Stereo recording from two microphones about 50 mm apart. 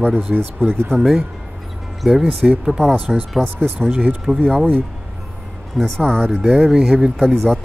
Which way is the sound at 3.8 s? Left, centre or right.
Right.